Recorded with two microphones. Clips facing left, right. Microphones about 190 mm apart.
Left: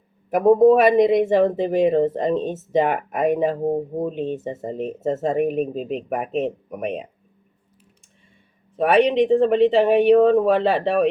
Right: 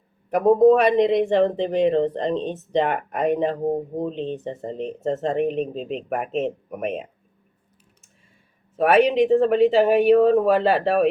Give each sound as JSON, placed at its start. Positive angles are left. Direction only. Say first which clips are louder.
{"t": 0.3, "sound": "speech", "louder": "left 1 dB", "side_deg": 5}
{"t": 2.4, "sound": "speech", "louder": "left 2 dB", "side_deg": 45}
{"t": 2.7, "sound": "speech", "louder": "left 2 dB", "side_deg": 5}
{"t": 8.7, "sound": "speech", "louder": "even", "side_deg": -5}